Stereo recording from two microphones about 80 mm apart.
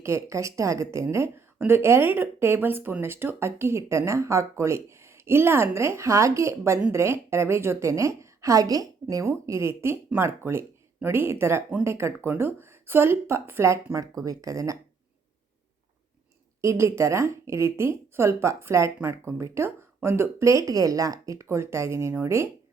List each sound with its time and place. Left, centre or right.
0.0 s a woman's voice: right
9.2 s a woman's voice: right
16.6 s a woman's voice: right